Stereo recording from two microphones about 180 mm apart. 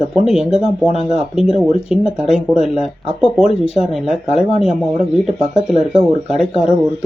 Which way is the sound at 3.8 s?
35° left (ahead or behind).